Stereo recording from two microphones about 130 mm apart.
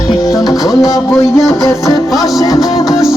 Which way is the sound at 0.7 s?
5° right (ahead or behind).